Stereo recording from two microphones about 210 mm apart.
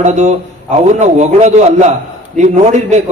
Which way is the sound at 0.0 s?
35° right (ahead or behind).